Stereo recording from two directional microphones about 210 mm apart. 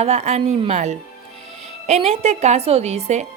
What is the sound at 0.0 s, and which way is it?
A woman's voice, 30° right (ahead or behind).